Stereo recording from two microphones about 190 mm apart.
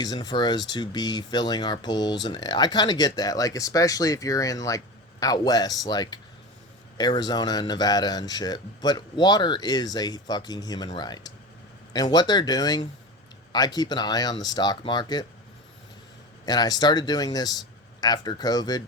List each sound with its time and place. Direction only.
0.0 s speech: 20° left (ahead or behind)
16.5 s speech: 20° left (ahead or behind)